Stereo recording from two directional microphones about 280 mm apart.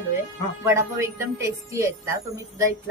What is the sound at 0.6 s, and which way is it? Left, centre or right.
A woman's voice, centre.